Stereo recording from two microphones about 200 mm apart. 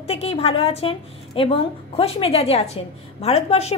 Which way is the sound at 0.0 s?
30° left (ahead or behind).